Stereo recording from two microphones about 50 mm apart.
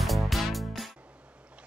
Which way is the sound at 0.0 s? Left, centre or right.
Centre.